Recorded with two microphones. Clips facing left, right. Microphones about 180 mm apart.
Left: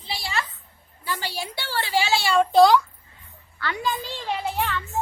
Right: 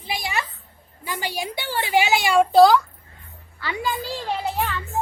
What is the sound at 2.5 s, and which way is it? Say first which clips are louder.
A child's voice: right 1 dB; centre (ahead or behind).